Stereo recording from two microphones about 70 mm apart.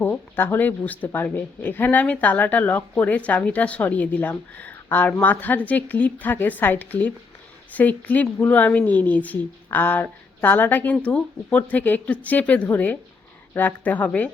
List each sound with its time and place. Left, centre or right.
0.0 s a woman's voice: left